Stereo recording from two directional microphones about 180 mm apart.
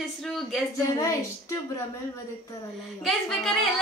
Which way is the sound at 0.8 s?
15° left (ahead or behind).